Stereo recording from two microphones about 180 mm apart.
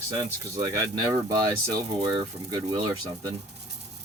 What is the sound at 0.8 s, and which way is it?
Speech, 20° right (ahead or behind).